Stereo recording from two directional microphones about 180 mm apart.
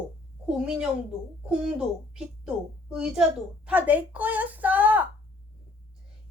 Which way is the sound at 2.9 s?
5° right (ahead or behind).